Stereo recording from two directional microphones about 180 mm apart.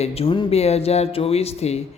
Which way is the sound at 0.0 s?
35° left (ahead or behind).